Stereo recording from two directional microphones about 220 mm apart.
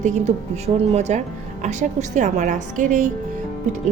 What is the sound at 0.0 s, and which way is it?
A woman's voice, 30° right (ahead or behind).